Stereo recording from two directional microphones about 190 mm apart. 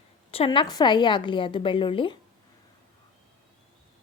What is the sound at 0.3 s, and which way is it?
A woman's voice, 30° left (ahead or behind).